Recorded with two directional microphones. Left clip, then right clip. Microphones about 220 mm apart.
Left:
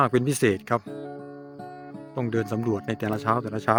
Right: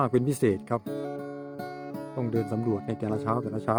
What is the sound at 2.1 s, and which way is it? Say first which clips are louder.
Speech: left 3 dB; centre (ahead or behind).